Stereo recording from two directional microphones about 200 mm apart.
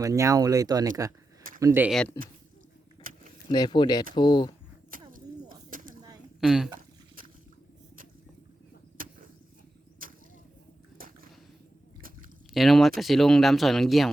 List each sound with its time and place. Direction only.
0.0 s speech: 15° right (ahead or behind)
1.9 s speech: centre (ahead or behind)
3.1 s a sound: 45° right (ahead or behind)
3.5 s speech: 20° left (ahead or behind)
4.9 s a sound: 45° right (ahead or behind)
6.4 s speech: 5° right (ahead or behind)
9.0 s vehicle: 45° right (ahead or behind)
10.0 s a sound: 45° right (ahead or behind)
12.5 s speech: centre (ahead or behind)